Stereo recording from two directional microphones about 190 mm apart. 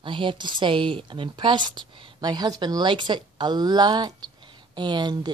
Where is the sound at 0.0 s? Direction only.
25° right (ahead or behind).